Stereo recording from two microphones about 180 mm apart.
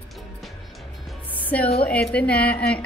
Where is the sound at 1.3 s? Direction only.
10° left (ahead or behind).